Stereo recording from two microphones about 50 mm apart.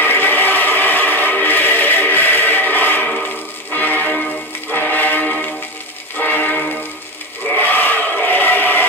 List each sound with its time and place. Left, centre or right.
0.0 s vehicle: left
3.7 s music: left
5.2 s music: left
6.1 s music: left
7.5 s crowd: left